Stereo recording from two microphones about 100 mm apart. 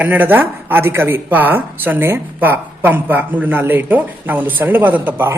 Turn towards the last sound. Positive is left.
turn(degrees=-20)  # may be behind; listen again after turning